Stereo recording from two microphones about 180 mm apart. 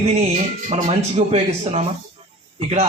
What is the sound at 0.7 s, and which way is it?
A man's voice, 35° right (ahead or behind).